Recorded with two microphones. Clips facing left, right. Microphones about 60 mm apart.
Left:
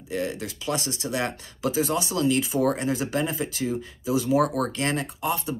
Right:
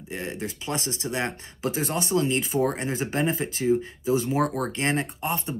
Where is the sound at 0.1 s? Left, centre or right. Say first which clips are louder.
Left 3 dB; right.